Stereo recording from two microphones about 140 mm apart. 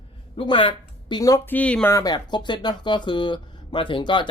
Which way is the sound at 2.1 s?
35° left (ahead or behind).